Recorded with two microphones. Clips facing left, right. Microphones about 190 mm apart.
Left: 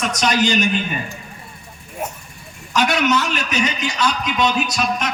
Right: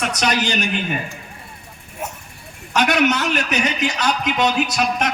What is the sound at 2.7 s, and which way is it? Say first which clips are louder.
A man's voice: even; 60° right (ahead or behind).